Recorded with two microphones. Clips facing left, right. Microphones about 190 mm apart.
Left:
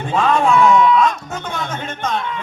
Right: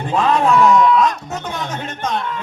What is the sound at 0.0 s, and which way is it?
Music, centre (ahead or behind).